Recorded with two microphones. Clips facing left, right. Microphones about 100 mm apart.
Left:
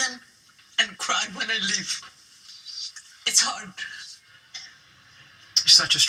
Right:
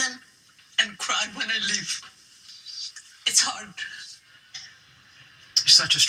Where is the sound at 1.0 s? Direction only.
25° left (ahead or behind).